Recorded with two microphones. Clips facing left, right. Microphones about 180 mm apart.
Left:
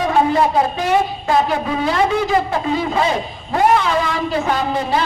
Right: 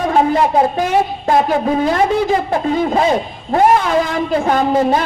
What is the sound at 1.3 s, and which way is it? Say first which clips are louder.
Speech: right 4 dB; 50° right (ahead or behind).